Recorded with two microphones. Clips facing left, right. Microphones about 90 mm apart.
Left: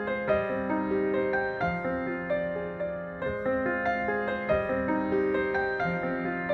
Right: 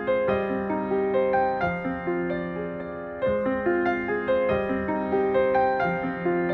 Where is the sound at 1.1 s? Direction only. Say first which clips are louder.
Right 6 dB; 20° left (ahead or behind).